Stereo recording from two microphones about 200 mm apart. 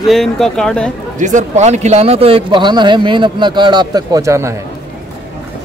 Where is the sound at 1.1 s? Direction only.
40° right (ahead or behind); by 4.6 s 15° right (ahead or behind).